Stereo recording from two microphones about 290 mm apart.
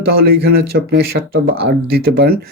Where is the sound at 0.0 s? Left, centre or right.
Right.